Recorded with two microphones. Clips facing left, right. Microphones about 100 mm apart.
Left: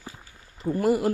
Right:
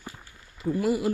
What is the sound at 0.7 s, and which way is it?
Speech, 45° left (ahead or behind).